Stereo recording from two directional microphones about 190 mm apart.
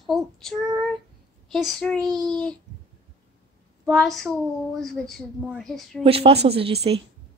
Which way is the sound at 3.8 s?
Centre (ahead or behind).